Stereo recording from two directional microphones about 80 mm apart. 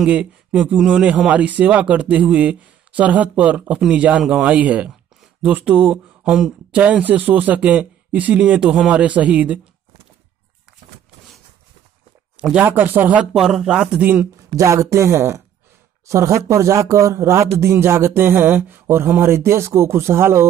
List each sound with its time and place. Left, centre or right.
0.0 s speech: centre
12.5 s speech: right
13.3 s speech: centre
14.5 s speech: right